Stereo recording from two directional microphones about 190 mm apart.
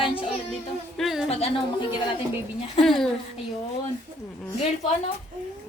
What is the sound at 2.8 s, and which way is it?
Speech, centre (ahead or behind).